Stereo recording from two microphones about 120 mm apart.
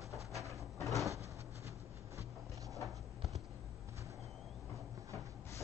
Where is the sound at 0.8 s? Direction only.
Centre (ahead or behind).